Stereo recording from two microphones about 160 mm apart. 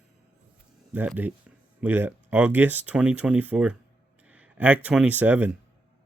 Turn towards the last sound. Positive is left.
turn(degrees=-10)  # may be behind; listen again after turning